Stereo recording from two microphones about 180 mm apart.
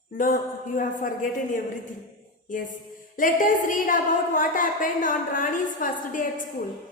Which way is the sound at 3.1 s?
50° left (ahead or behind).